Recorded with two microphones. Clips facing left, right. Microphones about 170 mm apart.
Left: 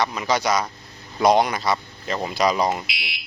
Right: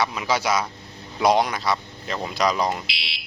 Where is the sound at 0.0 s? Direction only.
5° right (ahead or behind).